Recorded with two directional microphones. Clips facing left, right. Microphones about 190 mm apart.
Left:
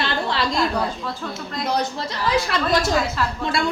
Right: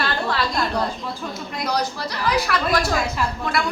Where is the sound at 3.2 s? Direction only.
15° right (ahead or behind).